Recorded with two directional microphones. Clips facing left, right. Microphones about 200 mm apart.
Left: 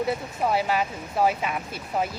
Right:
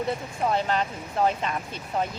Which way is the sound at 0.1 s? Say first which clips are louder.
Left 1 dB; 10° left (ahead or behind).